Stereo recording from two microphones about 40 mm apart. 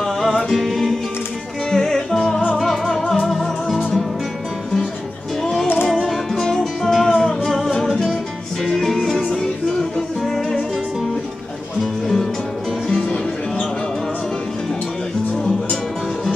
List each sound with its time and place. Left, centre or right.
0.5 s music: centre
5.4 s music: centre
8.6 s music: centre
11.8 s music: centre